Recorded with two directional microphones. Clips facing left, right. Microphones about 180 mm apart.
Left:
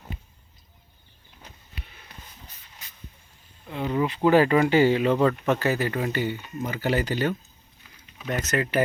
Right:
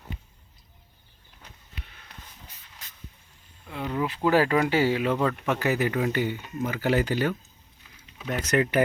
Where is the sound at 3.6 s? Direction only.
Centre (ahead or behind).